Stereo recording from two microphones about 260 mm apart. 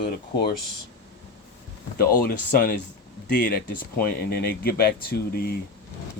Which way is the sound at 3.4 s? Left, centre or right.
Left.